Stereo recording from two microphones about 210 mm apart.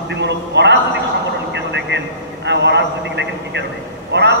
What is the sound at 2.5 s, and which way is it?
A man's voice, 55° right (ahead or behind).